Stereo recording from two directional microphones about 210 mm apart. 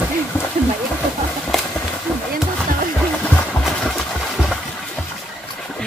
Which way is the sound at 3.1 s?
5° left (ahead or behind).